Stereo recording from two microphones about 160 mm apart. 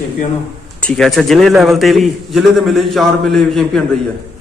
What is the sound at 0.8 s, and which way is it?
A man's voice, 5° left (ahead or behind).